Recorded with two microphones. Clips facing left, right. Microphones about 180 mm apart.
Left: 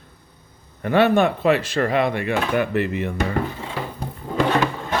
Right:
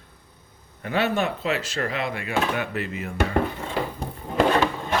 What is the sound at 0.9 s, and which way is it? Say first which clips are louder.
Speech: left 7 dB; 55° left (ahead or behind).